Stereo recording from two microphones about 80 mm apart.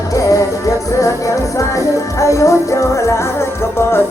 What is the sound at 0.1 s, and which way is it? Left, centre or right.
Music, left.